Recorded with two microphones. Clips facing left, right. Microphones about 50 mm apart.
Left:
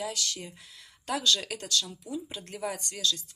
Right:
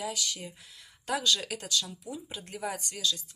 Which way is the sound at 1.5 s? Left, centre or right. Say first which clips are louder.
Left 1 dB; centre.